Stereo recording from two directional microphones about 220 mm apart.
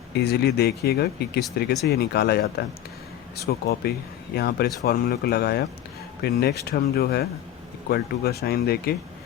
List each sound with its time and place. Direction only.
0.1 s speech: 50° left (ahead or behind)